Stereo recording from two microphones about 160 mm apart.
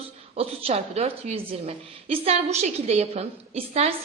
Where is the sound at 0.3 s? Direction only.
40° right (ahead or behind).